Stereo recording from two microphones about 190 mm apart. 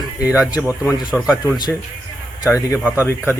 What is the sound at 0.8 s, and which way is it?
Speech, 20° left (ahead or behind).